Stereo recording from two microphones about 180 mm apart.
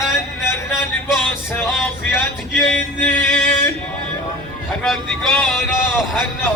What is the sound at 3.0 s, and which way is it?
Music, 10° left (ahead or behind).